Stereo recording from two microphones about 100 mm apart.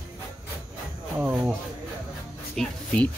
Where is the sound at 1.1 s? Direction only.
15° right (ahead or behind).